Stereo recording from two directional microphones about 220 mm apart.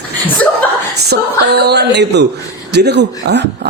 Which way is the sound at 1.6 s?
50° right (ahead or behind).